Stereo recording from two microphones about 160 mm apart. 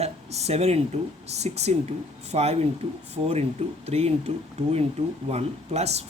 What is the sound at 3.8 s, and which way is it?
Speech, 40° right (ahead or behind).